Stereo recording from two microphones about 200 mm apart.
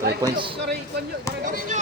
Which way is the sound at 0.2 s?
25° right (ahead or behind).